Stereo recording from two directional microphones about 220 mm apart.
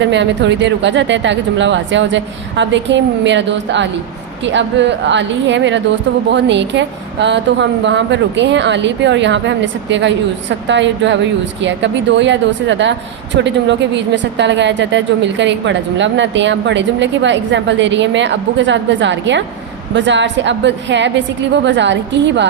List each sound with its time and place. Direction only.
0.1 s a woman's voice: 55° right (ahead or behind)